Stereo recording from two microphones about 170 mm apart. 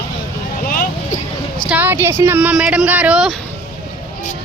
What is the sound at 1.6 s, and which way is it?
Speech, 10° right (ahead or behind).